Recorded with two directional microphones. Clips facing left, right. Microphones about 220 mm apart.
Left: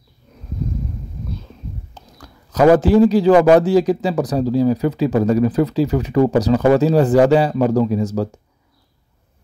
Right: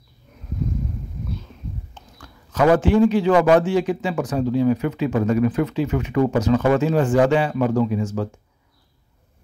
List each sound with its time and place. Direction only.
2.0 s speech: 35° left (ahead or behind)